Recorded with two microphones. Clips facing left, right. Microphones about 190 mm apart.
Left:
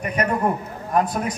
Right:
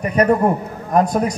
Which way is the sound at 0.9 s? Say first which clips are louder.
Right 5 dB; 40° right (ahead or behind).